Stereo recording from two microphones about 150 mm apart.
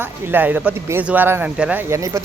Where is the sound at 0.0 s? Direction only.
15° right (ahead or behind).